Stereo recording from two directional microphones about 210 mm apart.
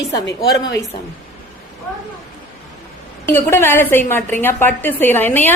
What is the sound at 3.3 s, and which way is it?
A woman's voice, 10° left (ahead or behind).